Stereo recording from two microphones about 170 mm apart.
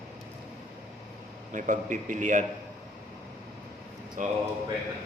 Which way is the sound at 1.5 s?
50° right (ahead or behind).